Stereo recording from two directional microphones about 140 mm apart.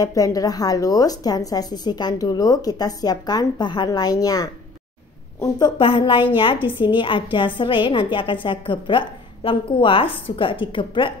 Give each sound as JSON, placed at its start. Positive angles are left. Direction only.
{"t": 0.0, "sound": "a woman's voice", "side_deg": 25}
{"t": 5.8, "sound": "a woman's voice", "side_deg": 40}